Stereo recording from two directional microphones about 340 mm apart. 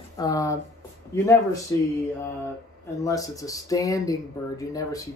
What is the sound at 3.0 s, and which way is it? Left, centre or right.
Speech, centre.